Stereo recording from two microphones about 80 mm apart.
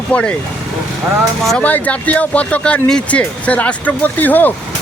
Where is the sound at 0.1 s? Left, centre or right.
Centre.